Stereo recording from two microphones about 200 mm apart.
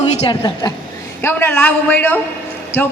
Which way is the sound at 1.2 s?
10° left (ahead or behind).